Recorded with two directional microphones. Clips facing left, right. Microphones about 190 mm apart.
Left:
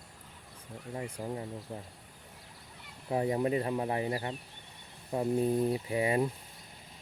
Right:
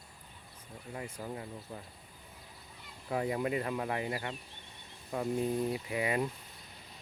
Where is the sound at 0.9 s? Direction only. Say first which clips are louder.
Left 4 dB; 25° left (ahead or behind).